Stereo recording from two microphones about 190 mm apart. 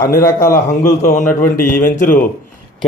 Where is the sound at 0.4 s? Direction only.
45° left (ahead or behind).